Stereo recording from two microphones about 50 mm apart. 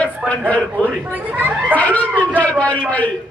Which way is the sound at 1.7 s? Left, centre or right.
Left.